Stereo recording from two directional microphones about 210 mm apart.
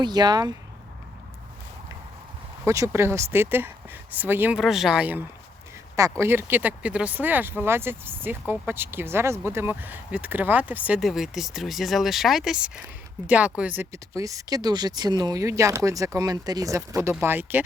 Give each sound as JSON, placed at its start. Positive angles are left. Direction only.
{"t": 0.0, "sound": "speech", "side_deg": -20}
{"t": 2.6, "sound": "speech", "side_deg": -15}